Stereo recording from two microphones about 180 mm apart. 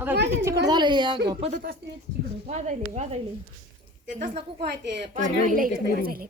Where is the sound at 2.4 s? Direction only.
40° right (ahead or behind).